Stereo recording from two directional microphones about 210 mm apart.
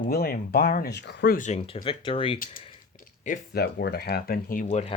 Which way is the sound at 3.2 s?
45° left (ahead or behind).